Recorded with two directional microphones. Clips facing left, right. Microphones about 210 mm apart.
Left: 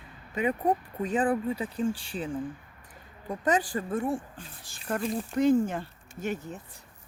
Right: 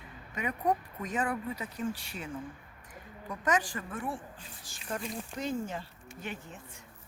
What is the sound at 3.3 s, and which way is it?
Speech, 35° left (ahead or behind).